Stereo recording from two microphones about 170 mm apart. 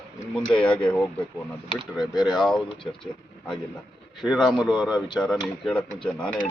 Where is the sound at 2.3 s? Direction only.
Centre (ahead or behind).